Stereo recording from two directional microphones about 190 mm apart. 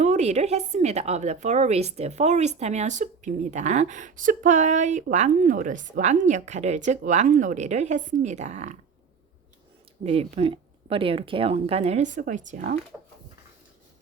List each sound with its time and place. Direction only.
0.0 s a woman's voice: 35° right (ahead or behind)
10.0 s a woman's voice: 35° right (ahead or behind)